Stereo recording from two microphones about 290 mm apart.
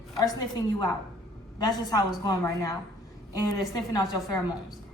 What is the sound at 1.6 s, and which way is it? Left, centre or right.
A woman's voice, centre.